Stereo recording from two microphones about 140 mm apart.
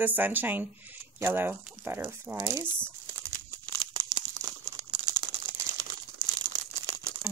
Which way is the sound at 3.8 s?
30° right (ahead or behind).